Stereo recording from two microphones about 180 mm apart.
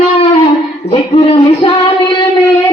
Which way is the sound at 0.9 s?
30° left (ahead or behind).